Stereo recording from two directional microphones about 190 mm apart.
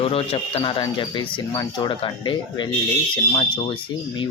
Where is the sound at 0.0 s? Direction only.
30° left (ahead or behind).